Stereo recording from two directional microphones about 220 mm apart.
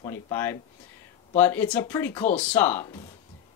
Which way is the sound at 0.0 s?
10° left (ahead or behind).